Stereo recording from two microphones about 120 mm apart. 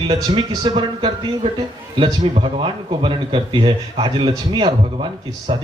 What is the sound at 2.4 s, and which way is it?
Speech, 45° right (ahead or behind).